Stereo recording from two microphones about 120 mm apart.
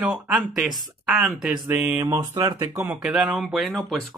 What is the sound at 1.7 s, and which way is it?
Speech, 15° right (ahead or behind).